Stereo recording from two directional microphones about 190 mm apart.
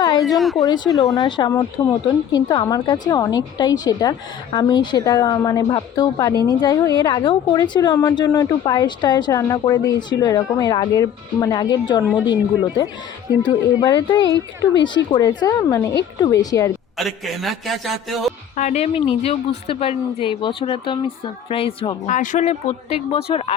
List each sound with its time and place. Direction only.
0.2 s a man's voice: centre (ahead or behind)
1.1 s a woman's voice: 20° left (ahead or behind)
12.0 s a man's voice: 5° right (ahead or behind)
13.4 s a woman's voice: 20° left (ahead or behind)
14.3 s speech: 70° left (ahead or behind)
14.9 s a woman's voice: 25° left (ahead or behind)
17.0 s a man's voice: centre (ahead or behind)
18.5 s a woman's voice: 40° left (ahead or behind)
22.1 s speech: 40° left (ahead or behind)